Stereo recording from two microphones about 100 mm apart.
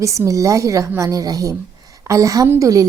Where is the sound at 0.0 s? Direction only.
30° right (ahead or behind).